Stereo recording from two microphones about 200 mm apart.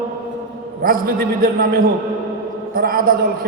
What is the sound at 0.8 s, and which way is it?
A man's voice, 45° right (ahead or behind).